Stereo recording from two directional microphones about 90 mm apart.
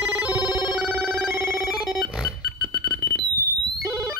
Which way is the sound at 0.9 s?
25° right (ahead or behind).